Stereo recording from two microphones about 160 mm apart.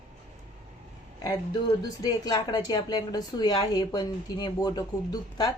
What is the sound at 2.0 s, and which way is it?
A woman's voice, 25° left (ahead or behind).